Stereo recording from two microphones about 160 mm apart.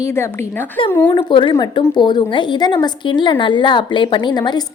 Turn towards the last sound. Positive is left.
turn(degrees=25)  # may be behind; listen again after turning